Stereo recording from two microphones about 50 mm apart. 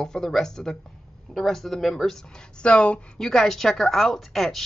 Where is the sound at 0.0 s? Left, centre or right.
Centre.